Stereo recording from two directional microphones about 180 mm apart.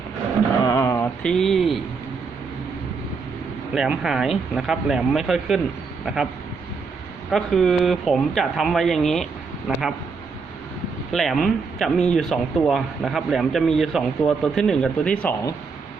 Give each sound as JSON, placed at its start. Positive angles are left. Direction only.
{"t": 0.6, "sound": "a sound", "side_deg": 20}
{"t": 1.2, "sound": "speech", "side_deg": 5}
{"t": 3.8, "sound": "speech", "side_deg": -5}
{"t": 7.3, "sound": "speech", "side_deg": 0}
{"t": 11.1, "sound": "speech", "side_deg": 0}